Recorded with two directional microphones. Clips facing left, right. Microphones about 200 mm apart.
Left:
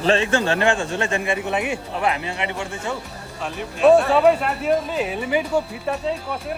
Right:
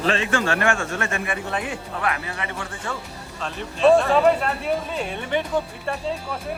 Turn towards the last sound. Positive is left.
turn(degrees=5)  # may be behind; listen again after turning